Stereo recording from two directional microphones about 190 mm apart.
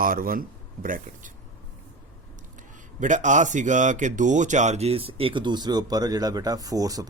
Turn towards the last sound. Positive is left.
turn(degrees=-20)  # may be behind; listen again after turning